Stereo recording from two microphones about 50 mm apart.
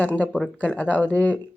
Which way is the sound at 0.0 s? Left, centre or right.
Left.